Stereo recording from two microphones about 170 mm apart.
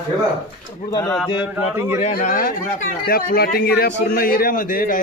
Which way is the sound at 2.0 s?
45° left (ahead or behind).